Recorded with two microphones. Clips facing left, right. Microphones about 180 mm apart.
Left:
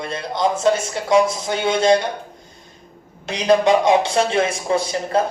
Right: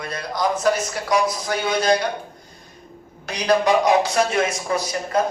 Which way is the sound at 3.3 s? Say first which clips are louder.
Left 3 dB; 25° left (ahead or behind).